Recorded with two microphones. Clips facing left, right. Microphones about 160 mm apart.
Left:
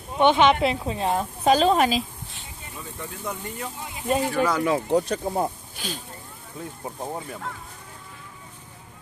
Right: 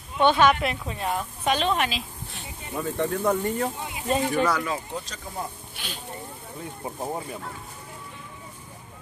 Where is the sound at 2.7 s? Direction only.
70° right (ahead or behind); by 3.7 s 50° right (ahead or behind).